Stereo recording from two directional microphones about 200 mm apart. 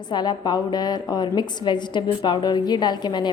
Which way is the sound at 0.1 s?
20° left (ahead or behind).